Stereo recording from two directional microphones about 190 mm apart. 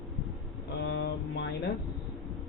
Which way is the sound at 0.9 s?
65° left (ahead or behind).